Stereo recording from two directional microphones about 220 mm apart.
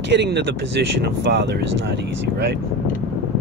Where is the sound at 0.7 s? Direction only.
50° right (ahead or behind).